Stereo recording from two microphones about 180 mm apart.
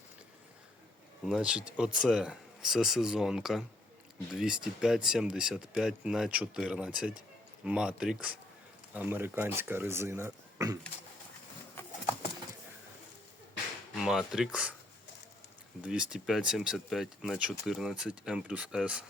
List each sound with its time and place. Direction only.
1.3 s speech: 5° right (ahead or behind)
13.9 s speech: centre (ahead or behind)
15.8 s speech: 5° right (ahead or behind)